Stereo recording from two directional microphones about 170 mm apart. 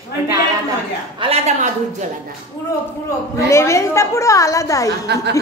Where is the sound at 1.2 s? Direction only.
40° right (ahead or behind).